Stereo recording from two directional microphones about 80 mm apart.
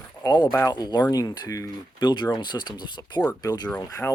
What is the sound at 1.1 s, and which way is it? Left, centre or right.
Speech, left.